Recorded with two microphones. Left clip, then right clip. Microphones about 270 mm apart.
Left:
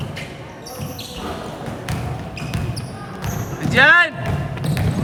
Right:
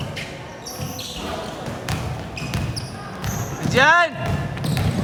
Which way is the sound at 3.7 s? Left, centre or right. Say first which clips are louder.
Left 3 dB; centre.